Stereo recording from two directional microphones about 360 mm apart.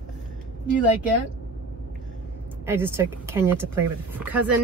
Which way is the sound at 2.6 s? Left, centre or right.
Centre.